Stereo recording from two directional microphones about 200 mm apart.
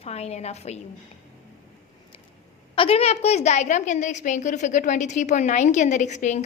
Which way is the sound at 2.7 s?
30° left (ahead or behind).